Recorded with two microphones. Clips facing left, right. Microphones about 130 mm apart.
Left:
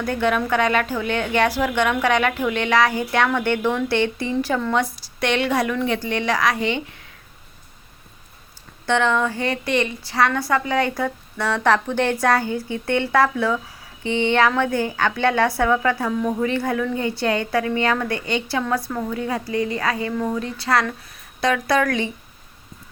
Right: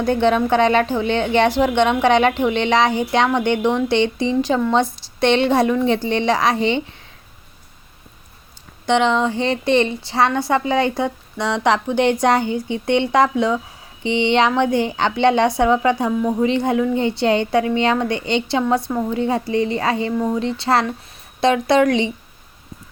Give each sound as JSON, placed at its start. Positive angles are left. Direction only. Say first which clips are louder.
{"t": 0.0, "sound": "speech", "louder": "right 5 dB", "side_deg": -25}
{"t": 8.9, "sound": "speech", "louder": "right 3 dB", "side_deg": -20}